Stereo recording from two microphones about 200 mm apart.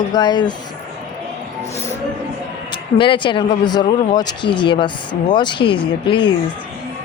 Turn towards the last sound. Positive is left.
turn(degrees=25)  # may be behind; listen again after turning